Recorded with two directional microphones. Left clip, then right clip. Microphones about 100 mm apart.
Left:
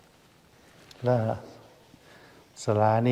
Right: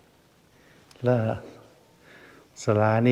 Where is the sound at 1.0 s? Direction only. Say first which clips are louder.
Right 1 dB; 80° right.